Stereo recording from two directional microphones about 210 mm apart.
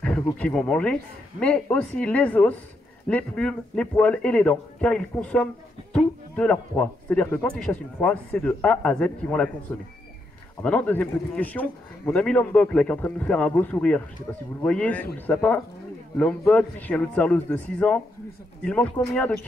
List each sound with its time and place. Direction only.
0.0 s a man's voice: 5° left (ahead or behind)